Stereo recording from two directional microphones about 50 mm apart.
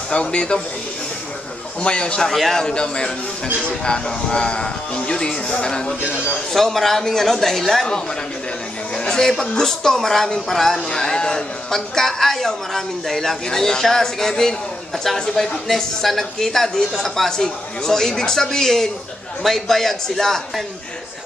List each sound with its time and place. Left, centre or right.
0.1 s speech: left
1.8 s speech: left
2.2 s speech: centre
6.5 s speech: centre